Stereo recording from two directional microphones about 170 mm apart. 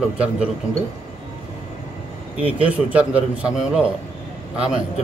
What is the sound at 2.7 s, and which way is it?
Speech, 10° right (ahead or behind).